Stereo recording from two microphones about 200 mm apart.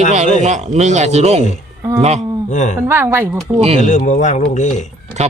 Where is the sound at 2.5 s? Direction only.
35° left (ahead or behind).